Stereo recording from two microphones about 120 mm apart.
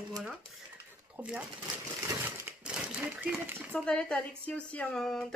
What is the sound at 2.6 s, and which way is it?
Typewriter, 10° right (ahead or behind).